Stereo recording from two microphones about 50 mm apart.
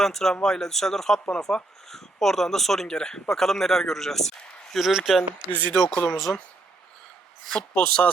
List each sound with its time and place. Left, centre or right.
0.0 s a man's voice: centre
4.8 s speech: centre
5.5 s speech: left
6.1 s speech: centre
7.7 s speech: left